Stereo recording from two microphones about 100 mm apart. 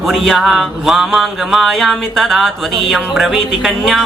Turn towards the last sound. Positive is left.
turn(degrees=0)  # may be behind; listen again after turning